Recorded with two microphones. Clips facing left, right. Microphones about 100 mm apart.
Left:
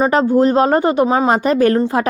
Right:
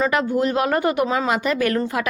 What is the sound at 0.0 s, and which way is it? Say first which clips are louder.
Speech: left 7 dB; 35° left (ahead or behind).